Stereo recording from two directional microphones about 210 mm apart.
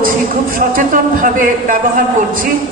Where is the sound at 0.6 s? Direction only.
40° right (ahead or behind).